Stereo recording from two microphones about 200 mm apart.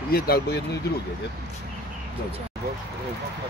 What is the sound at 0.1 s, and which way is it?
Speech, 50° left (ahead or behind).